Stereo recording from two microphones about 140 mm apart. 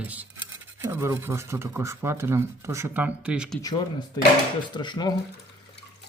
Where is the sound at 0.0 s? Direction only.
10° right (ahead or behind).